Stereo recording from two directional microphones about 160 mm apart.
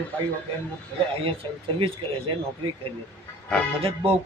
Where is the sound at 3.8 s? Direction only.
35° right (ahead or behind).